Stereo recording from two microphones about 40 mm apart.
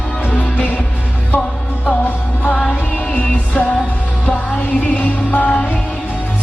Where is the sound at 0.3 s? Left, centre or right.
Left.